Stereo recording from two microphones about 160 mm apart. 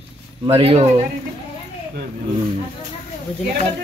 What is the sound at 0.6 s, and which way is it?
Speech, 40° right (ahead or behind).